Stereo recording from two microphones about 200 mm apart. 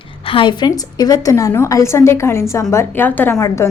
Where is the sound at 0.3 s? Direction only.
25° left (ahead or behind).